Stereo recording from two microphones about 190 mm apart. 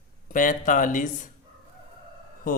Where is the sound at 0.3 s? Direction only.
45° left (ahead or behind).